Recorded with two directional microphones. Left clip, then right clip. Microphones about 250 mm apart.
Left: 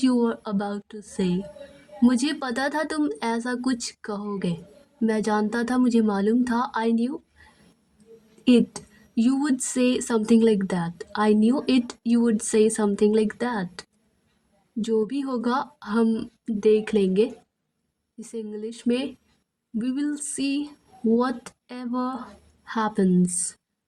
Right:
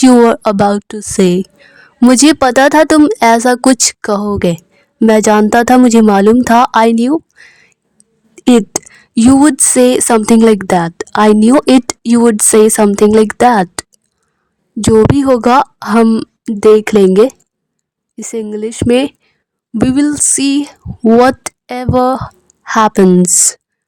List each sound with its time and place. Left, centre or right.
0.0 s a woman's voice: right
8.4 s a woman's voice: right